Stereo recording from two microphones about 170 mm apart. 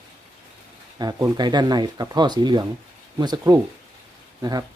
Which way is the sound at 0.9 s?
25° right (ahead or behind).